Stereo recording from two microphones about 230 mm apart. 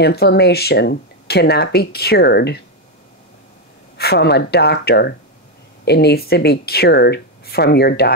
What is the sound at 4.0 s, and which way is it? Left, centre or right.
Speech, left.